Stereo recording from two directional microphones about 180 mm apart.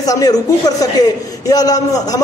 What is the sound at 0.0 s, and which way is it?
A man's voice, 20° left (ahead or behind).